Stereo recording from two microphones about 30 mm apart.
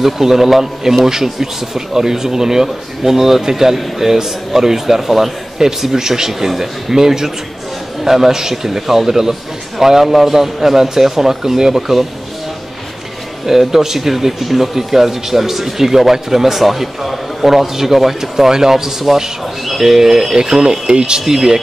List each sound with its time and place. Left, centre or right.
0.0 s speech: centre
13.5 s speech: centre; by 21.2 s right
21.3 s speech: centre